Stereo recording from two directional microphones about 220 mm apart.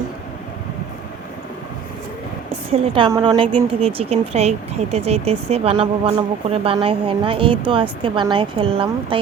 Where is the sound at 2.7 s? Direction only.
20° right (ahead or behind).